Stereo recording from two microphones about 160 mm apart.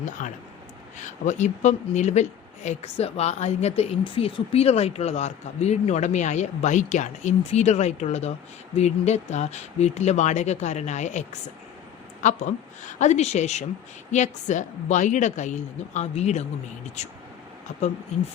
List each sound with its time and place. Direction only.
0.2 s speech: 50° left (ahead or behind)